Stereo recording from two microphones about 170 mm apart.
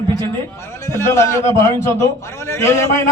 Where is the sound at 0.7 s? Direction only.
15° left (ahead or behind).